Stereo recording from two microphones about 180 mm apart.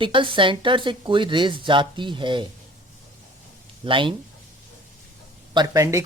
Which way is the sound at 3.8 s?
30° right (ahead or behind).